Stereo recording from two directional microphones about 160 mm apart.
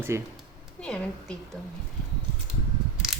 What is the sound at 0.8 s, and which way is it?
Speech, 5° left (ahead or behind).